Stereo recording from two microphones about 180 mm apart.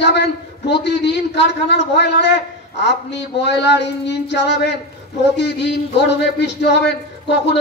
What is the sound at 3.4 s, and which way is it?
A man's voice, 75° left (ahead or behind).